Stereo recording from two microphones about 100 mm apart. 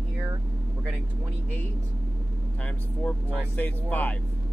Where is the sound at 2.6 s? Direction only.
15° left (ahead or behind).